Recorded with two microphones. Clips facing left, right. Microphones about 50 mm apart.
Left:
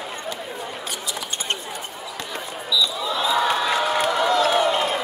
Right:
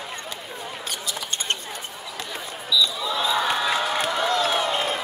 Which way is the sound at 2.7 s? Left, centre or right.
Centre.